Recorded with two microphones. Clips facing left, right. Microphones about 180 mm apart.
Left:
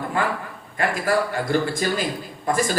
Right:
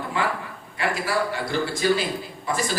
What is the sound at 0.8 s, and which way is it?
A man's voice, 50° left (ahead or behind).